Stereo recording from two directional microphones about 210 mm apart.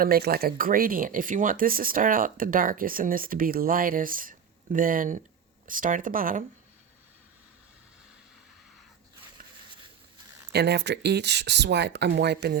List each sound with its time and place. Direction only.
0.0 s speech: 45° right (ahead or behind)
10.5 s speech: 50° right (ahead or behind)